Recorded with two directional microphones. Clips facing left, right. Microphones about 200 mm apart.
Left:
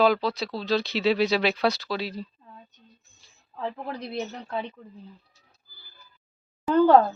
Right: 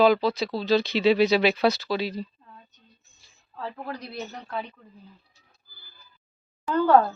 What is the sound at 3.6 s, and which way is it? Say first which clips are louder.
Speech: left 2 dB; 20° left (ahead or behind).